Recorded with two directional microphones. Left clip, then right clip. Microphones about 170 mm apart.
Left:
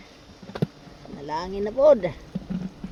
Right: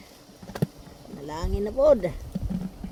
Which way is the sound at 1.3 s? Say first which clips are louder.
Left 3 dB; 60° right (ahead or behind).